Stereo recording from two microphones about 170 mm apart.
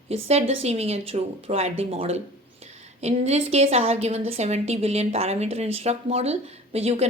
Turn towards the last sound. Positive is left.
turn(degrees=-35)  # may be behind; listen again after turning